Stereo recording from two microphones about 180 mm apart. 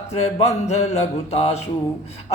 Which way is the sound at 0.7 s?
40° left (ahead or behind).